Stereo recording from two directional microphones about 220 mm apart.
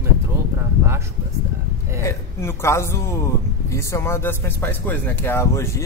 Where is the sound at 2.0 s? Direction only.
10° left (ahead or behind).